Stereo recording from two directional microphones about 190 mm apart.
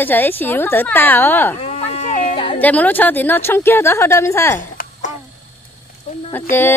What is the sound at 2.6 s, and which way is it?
Speech, 10° left (ahead or behind).